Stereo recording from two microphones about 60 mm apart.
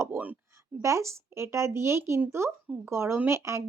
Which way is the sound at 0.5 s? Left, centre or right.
Right.